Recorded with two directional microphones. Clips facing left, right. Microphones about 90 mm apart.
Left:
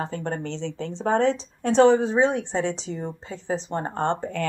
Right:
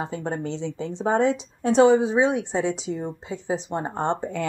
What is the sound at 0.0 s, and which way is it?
Speech, 10° right (ahead or behind).